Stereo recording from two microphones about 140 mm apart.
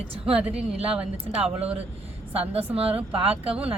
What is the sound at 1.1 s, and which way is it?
Speech, 5° right (ahead or behind).